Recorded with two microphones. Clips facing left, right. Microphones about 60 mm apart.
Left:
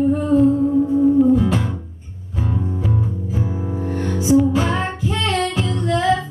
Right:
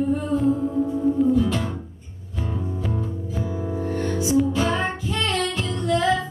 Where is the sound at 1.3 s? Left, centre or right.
Left.